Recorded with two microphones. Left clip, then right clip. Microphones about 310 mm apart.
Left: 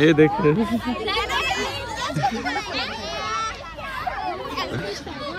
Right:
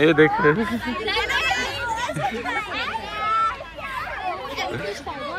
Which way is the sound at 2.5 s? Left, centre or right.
Centre.